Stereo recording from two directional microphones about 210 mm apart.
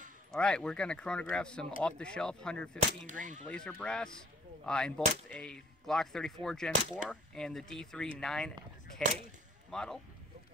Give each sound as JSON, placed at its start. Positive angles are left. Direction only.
{"t": 0.3, "sound": "speech", "side_deg": 5}
{"t": 3.1, "sound": "speech", "side_deg": -35}
{"t": 3.4, "sound": "speech", "side_deg": 5}